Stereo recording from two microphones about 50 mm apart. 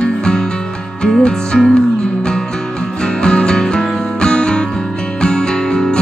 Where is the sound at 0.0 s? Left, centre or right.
Centre.